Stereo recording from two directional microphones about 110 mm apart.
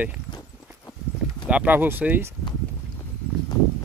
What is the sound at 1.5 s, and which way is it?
Speech, 15° right (ahead or behind).